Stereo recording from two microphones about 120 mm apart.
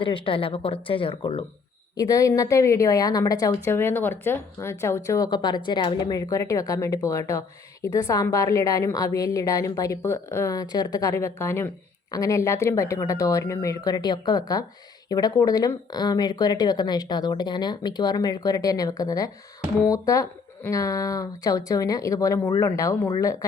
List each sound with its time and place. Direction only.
0.0 s speech: 45° left (ahead or behind)
2.0 s a woman's voice: 30° left (ahead or behind)
3.7 s a woman's voice: 15° left (ahead or behind)